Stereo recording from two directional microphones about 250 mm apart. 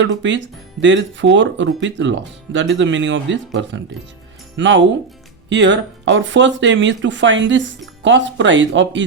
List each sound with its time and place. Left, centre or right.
0.0 s speech: right